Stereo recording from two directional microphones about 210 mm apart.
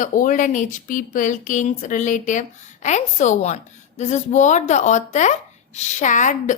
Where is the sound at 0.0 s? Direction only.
40° left (ahead or behind).